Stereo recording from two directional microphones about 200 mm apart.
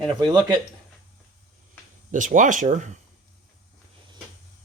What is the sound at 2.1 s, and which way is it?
Speech, 40° right (ahead or behind).